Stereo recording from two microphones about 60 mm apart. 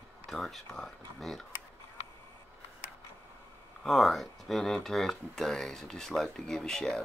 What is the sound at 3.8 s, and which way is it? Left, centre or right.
Speech, centre.